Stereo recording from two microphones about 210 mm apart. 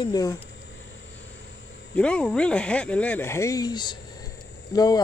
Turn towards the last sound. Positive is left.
turn(degrees=20)  # may be behind; listen again after turning